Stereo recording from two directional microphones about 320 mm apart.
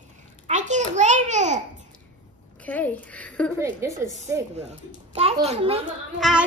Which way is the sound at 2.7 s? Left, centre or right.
Centre.